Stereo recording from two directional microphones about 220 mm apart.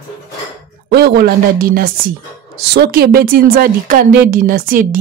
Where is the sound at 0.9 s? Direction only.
45° right (ahead or behind).